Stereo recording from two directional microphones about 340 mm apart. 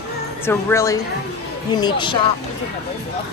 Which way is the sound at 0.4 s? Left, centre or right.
Centre.